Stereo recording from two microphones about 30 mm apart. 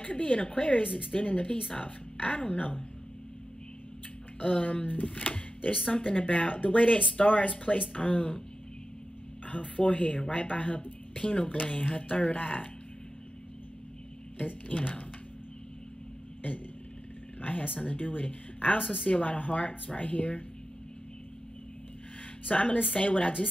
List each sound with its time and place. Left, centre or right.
0.0 s speech: left
4.4 s speech: left
7.2 s speech: left
9.5 s speech: left
11.6 s speech: left
14.4 s speech: left
17.4 s a sound: left
17.7 s speech: left
22.5 s speech: left